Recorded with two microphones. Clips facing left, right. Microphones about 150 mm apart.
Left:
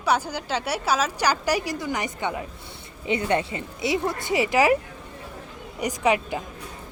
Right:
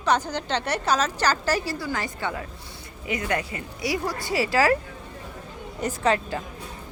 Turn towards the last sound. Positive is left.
turn(degrees=15)  # may be behind; listen again after turning